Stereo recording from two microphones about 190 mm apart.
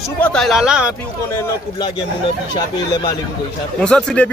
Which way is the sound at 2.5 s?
20° left (ahead or behind).